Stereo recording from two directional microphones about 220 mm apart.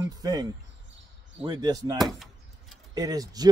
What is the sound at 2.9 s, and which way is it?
Speech, 15° right (ahead or behind).